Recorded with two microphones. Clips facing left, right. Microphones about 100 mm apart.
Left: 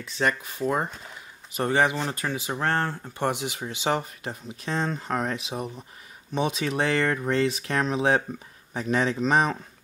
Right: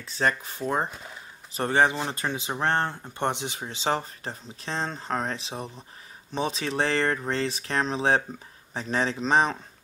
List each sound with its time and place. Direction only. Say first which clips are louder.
0.0 s speech: even; 30° right (ahead or behind)
1.5 s speech: even; 35° right (ahead or behind)